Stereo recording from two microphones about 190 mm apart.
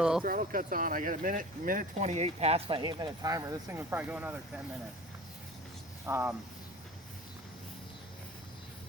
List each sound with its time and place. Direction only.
0.3 s speech: 45° right (ahead or behind); by 4.6 s 10° right (ahead or behind)
6.1 s speech: 10° right (ahead or behind)